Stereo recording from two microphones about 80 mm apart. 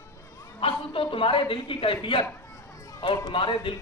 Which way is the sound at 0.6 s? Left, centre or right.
Left.